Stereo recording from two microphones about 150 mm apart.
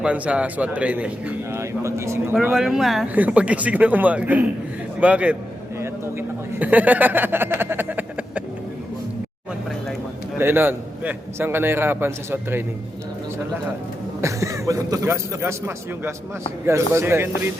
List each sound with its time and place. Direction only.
0.0 s a man's voice: 10° right (ahead or behind)
2.6 s a man's voice: centre (ahead or behind)
10.3 s a man's voice: 15° right (ahead or behind)
14.2 s a man's voice: 20° right (ahead or behind)